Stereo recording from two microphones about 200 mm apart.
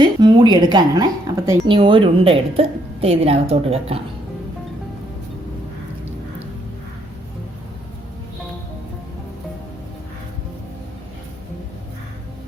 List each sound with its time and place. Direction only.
0.0 s speech: 20° right (ahead or behind)